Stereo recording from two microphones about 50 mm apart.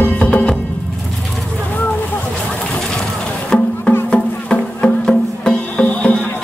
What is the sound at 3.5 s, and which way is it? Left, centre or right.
Music, left.